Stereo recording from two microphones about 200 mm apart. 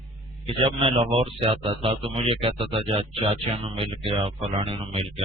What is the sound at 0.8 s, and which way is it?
Speech, 30° right (ahead or behind).